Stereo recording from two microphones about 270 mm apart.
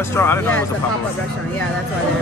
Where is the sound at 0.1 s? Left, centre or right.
Centre.